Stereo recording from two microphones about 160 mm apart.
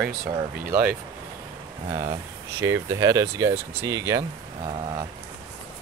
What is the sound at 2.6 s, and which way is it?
Speech, 20° right (ahead or behind).